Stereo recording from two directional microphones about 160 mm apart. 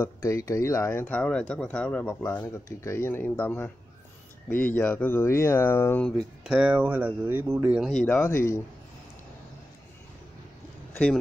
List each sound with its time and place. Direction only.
0.0 s speech: 20° left (ahead or behind)
6.4 s speech: 5° right (ahead or behind)
7.9 s speech: 5° left (ahead or behind)
8.2 s speech: 15° left (ahead or behind)